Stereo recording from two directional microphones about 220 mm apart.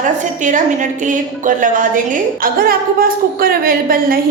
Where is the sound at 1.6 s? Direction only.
35° right (ahead or behind).